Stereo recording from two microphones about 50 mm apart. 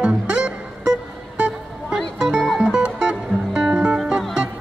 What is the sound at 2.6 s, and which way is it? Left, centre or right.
Music, centre.